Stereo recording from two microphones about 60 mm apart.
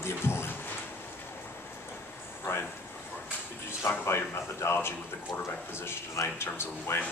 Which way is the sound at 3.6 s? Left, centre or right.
Left.